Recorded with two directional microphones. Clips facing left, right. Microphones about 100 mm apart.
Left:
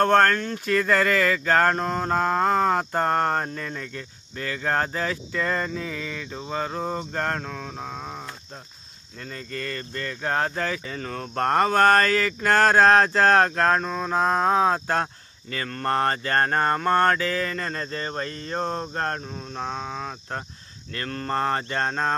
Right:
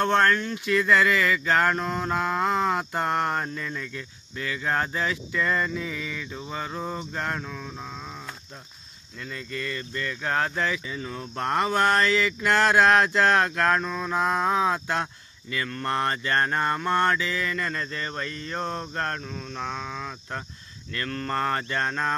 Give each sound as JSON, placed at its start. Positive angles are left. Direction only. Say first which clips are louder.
{"t": 0.0, "sound": "a sound", "louder": "left 3 dB", "side_deg": 45}
{"t": 9.1, "sound": "speech", "louder": "even", "side_deg": 40}
{"t": 10.8, "sound": "speech", "louder": "left 2 dB", "side_deg": 55}